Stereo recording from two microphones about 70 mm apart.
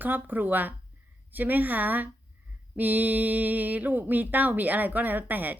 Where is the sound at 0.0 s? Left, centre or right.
Right.